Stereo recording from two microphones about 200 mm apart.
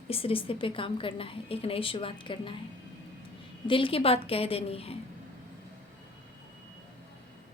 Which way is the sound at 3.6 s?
25° left (ahead or behind).